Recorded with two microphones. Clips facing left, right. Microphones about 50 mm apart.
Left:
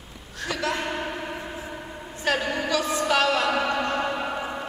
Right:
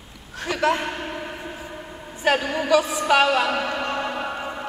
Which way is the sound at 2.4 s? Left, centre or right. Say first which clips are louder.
Right 5 dB; centre.